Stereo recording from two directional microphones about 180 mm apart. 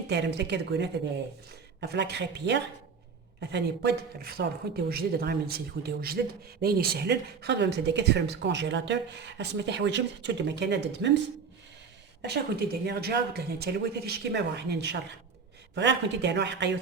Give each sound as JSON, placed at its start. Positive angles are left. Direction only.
{"t": 0.1, "sound": "a man's voice", "side_deg": -70}
{"t": 12.2, "sound": "a man's voice", "side_deg": -65}